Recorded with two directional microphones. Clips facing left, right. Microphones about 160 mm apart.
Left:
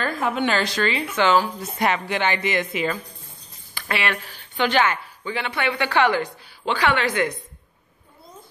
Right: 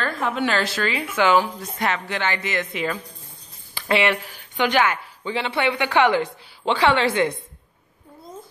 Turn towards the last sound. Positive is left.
turn(degrees=-25)  # may be behind; listen again after turning